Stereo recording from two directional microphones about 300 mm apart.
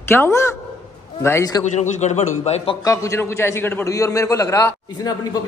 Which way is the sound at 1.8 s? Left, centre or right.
Left.